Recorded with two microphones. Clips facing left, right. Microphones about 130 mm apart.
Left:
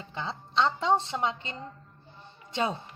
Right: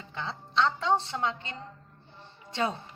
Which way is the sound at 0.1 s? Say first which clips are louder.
Left 1 dB; 20° left (ahead or behind).